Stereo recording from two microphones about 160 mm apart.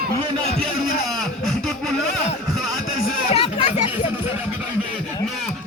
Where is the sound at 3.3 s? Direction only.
40° left (ahead or behind).